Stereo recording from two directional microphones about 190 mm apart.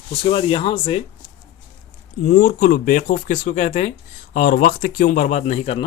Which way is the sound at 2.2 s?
45° left (ahead or behind).